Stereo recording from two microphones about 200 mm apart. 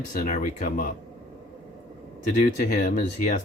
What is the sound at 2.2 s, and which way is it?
Speech, 40° left (ahead or behind).